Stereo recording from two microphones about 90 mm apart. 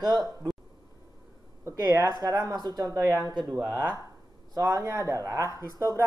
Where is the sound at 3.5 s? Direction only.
20° right (ahead or behind).